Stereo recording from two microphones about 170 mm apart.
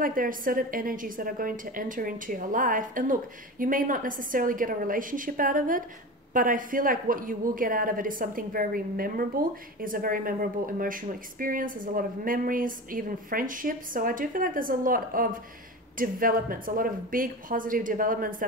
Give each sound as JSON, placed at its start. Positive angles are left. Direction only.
{"t": 0.0, "sound": "a woman's voice", "side_deg": -55}